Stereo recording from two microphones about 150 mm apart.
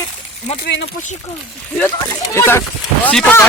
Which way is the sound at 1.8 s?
20° left (ahead or behind).